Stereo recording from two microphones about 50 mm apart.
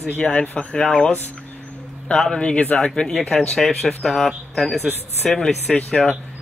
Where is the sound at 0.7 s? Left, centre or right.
Centre.